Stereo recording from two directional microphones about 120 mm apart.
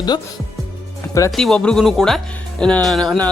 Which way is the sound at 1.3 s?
5° left (ahead or behind).